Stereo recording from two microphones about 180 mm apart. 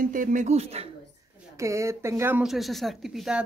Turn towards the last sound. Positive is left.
turn(degrees=0)  # may be behind; listen again after turning